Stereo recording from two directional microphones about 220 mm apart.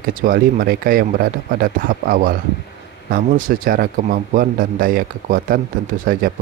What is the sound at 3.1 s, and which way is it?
Speech, 40° right (ahead or behind).